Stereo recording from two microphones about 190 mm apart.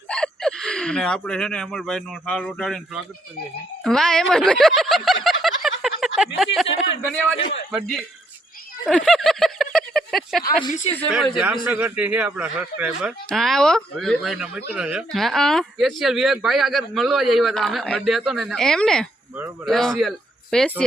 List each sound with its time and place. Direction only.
0.1 s speech: 5° left (ahead or behind)
5.2 s a sound: centre (ahead or behind)
5.8 s speech: centre (ahead or behind)
7.3 s a man's voice: 75° left (ahead or behind)
7.7 s speech: centre (ahead or behind)
8.9 s a sound: centre (ahead or behind)
11.6 s a man's voice: 10° right (ahead or behind)